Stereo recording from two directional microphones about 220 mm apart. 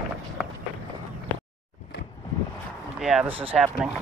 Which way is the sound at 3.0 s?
Centre (ahead or behind).